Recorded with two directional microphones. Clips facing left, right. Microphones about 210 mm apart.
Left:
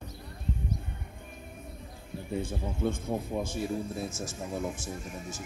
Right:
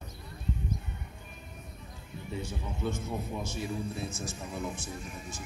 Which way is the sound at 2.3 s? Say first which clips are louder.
Left 5 dB; 50° left (ahead or behind).